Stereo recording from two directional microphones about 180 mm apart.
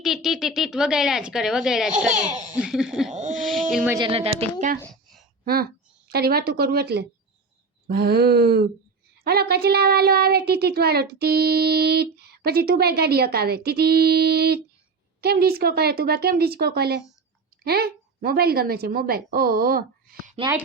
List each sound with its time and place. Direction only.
0.0 s speech: centre (ahead or behind)
3.1 s speech: 40° right (ahead or behind)
3.3 s speech: centre (ahead or behind)
3.9 s speech: 30° right (ahead or behind)
4.8 s a sound: 5° left (ahead or behind)
6.1 s a woman's voice: 60° right (ahead or behind)
20.3 s a woman's voice: 25° right (ahead or behind)